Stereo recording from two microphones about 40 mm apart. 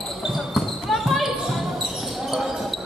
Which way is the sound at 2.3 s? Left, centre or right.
Centre.